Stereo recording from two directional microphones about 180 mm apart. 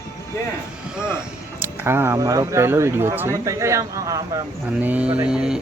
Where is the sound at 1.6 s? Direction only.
15° right (ahead or behind).